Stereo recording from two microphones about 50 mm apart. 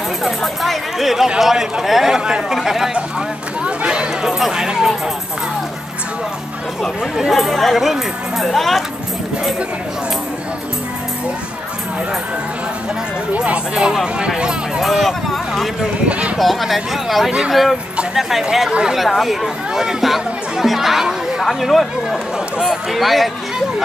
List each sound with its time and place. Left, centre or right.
0.2 s speech: centre
3.6 s chatter: centre
4.4 s speech: centre
7.2 s speech: centre
14.0 s speech: centre
14.8 s speech: centre
16.1 s speech: right
16.3 s speech: centre
18.9 s speech: centre